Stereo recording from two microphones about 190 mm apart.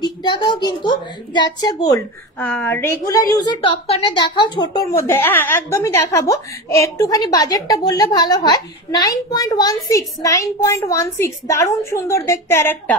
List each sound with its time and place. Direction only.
0.2 s a woman's voice: 25° left (ahead or behind)
4.9 s speech: 15° left (ahead or behind)